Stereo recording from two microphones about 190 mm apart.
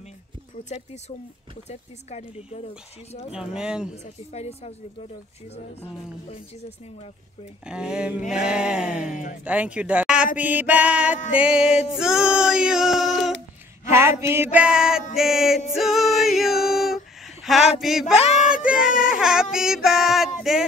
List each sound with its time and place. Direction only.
1.7 s speech: 35° left (ahead or behind)
3.3 s music: 5° right (ahead or behind)
3.9 s speech: 35° left (ahead or behind)
7.6 s music: 5° right (ahead or behind)
9.4 s speech: 5° right (ahead or behind)
11.9 s music: 5° right (ahead or behind)
14.2 s speech: 10° right (ahead or behind)
15.1 s music: centre (ahead or behind)
18.7 s baby cry: 45° left (ahead or behind)
19.1 s a sound: 5° right (ahead or behind)